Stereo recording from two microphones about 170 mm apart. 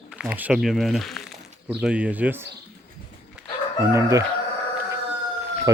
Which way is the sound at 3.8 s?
15° right (ahead or behind).